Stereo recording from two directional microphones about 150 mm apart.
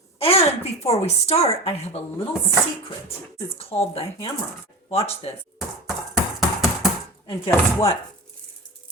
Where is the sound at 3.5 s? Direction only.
40° left (ahead or behind).